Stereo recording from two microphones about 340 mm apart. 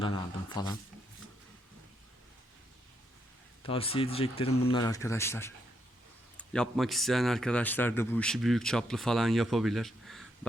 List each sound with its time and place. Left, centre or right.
0.0 s speech: centre
3.6 s a man's voice: centre